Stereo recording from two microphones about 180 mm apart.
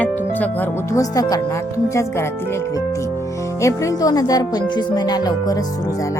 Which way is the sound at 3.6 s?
20° left (ahead or behind).